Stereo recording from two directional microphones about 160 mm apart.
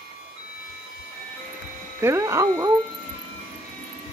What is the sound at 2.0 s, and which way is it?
Speech, 15° right (ahead or behind).